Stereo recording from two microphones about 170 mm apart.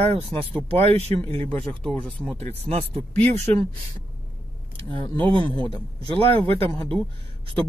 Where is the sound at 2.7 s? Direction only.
35° right (ahead or behind).